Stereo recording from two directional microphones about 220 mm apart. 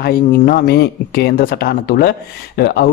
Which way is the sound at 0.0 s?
45° left (ahead or behind).